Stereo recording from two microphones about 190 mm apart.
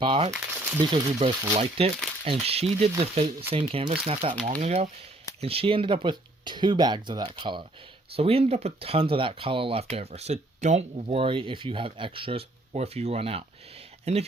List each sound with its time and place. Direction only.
0.0 s speech: 25° right (ahead or behind)